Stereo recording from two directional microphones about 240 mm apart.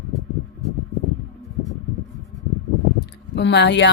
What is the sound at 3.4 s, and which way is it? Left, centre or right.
Speech, left.